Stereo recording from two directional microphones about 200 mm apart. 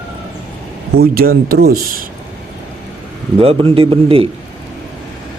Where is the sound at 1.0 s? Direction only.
50° right (ahead or behind).